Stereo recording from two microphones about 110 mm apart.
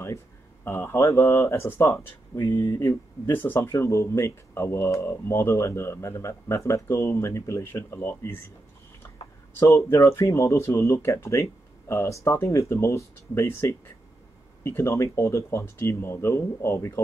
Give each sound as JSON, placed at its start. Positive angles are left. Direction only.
{"t": 0.7, "sound": "speech", "side_deg": 20}
{"t": 2.3, "sound": "speech", "side_deg": 35}
{"t": 2.6, "sound": "speech", "side_deg": 25}
{"t": 9.6, "sound": "speech", "side_deg": 25}